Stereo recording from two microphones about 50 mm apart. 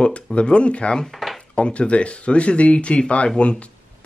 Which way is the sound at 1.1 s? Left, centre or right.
Centre.